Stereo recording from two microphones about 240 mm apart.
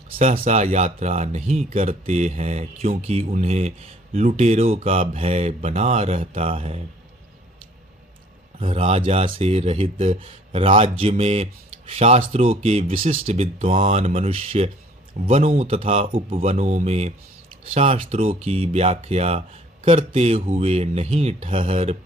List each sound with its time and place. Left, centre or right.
0.2 s speech: right
8.5 s speech: right